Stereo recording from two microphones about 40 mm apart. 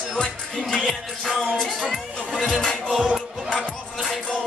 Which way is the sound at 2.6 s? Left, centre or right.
Centre.